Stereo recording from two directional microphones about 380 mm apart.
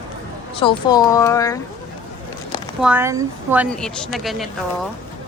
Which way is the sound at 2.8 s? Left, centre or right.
Centre.